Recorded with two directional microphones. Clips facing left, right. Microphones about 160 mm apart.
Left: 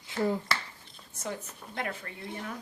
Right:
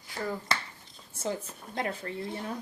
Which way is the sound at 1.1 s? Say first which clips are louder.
Right 4 dB; 30° right (ahead or behind).